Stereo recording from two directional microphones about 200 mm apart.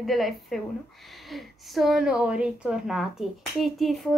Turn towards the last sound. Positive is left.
turn(degrees=0)  # may be behind; listen again after turning